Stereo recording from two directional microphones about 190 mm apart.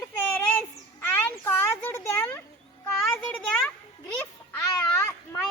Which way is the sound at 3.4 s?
5° left (ahead or behind).